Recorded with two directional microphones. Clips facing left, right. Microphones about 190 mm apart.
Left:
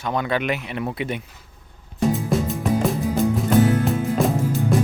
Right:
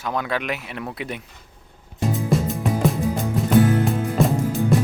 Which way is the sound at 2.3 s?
Centre (ahead or behind).